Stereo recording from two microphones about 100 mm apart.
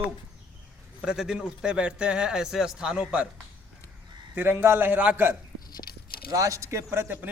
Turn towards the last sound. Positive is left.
turn(degrees=-25)  # may be behind; listen again after turning